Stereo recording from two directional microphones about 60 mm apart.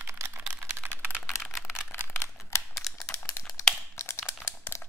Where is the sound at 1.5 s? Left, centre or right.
Left.